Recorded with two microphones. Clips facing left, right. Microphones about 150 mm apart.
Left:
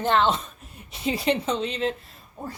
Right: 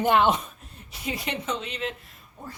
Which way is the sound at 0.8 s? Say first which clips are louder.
Left 8 dB; 30° left (ahead or behind).